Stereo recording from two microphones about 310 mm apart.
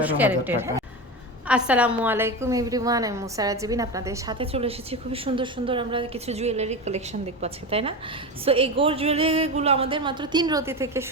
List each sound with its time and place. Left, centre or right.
0.0 s a woman's voice: centre